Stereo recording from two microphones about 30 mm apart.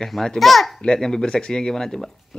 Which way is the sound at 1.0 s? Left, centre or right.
Left.